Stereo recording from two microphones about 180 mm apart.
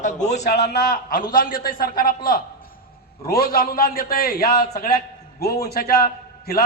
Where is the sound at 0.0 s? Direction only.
40° left (ahead or behind).